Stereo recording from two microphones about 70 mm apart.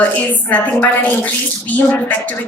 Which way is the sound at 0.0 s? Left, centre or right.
Left.